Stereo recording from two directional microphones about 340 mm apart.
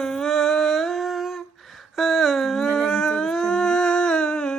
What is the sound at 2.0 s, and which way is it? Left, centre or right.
Howl, centre.